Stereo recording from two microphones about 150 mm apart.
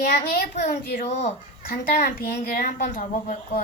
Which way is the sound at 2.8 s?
60° left (ahead or behind).